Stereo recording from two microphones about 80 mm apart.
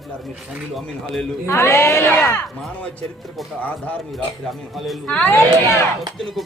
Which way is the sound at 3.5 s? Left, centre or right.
Centre.